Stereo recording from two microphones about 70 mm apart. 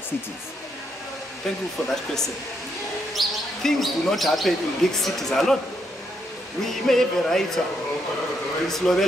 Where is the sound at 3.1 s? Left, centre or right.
Centre.